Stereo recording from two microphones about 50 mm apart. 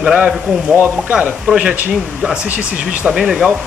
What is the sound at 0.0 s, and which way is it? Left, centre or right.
Speech, centre.